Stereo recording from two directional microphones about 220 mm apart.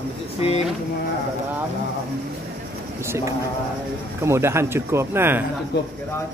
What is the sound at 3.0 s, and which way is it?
Speech, 15° right (ahead or behind).